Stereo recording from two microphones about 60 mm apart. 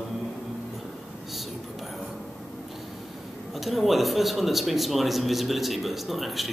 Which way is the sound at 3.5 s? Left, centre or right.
Centre.